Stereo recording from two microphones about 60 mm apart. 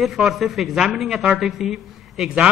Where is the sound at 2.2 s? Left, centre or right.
Centre.